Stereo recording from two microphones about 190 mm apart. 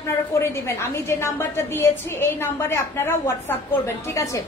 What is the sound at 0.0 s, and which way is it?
A woman's voice, 15° left (ahead or behind).